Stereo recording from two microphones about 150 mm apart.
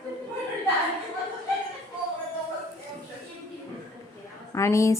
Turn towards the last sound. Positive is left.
turn(degrees=20)  # may be behind; listen again after turning